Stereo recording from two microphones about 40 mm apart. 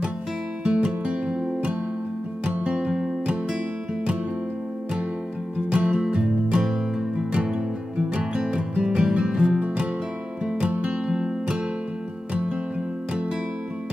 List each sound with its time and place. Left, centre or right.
0.7 s music: right
5.7 s music: right
10.7 s music: right